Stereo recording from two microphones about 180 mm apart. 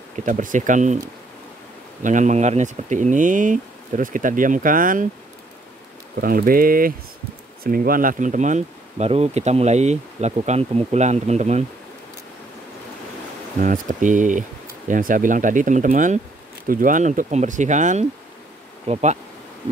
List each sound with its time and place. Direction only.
0.1 s speech: 45° right (ahead or behind)
2.0 s speech: 45° right (ahead or behind)
6.2 s speech: 50° right (ahead or behind)
13.6 s speech: 45° right (ahead or behind)